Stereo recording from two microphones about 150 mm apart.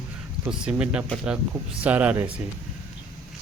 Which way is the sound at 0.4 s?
5° right (ahead or behind).